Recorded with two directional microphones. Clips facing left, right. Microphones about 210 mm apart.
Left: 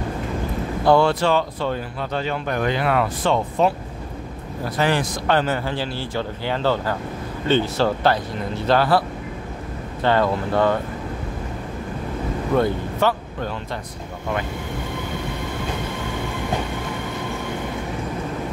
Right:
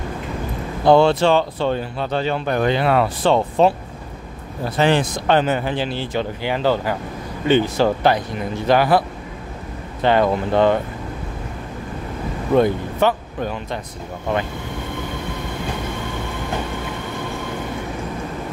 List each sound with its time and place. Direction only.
0.8 s speech: 25° right (ahead or behind)
10.0 s speech: 15° right (ahead or behind)
12.5 s speech: 15° right (ahead or behind)